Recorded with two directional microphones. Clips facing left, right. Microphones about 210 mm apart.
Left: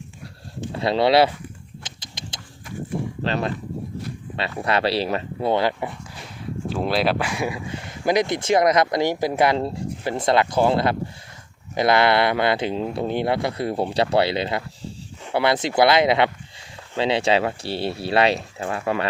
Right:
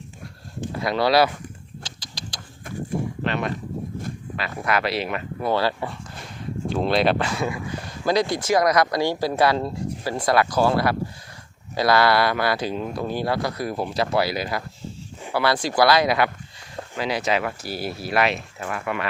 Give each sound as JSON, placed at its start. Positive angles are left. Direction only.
{"t": 0.7, "sound": "speech", "side_deg": 25}
{"t": 1.8, "sound": "a sound", "side_deg": 20}
{"t": 3.2, "sound": "speech", "side_deg": 30}
{"t": 6.7, "sound": "speech", "side_deg": 5}